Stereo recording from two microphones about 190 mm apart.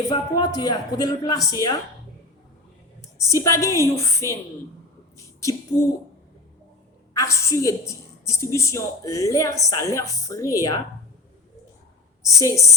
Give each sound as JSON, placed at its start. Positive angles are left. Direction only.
{"t": 0.1, "sound": "a woman's voice", "side_deg": 20}
{"t": 3.2, "sound": "a woman's voice", "side_deg": 15}
{"t": 7.1, "sound": "a woman's voice", "side_deg": 15}
{"t": 12.2, "sound": "a woman's voice", "side_deg": 15}